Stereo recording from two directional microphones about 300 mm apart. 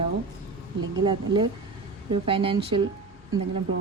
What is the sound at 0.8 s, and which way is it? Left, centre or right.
Speech, centre.